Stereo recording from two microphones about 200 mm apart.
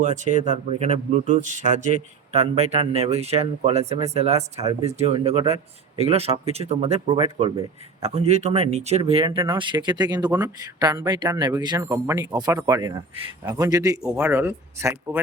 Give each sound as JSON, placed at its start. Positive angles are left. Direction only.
{"t": 0.5, "sound": "speech", "side_deg": -35}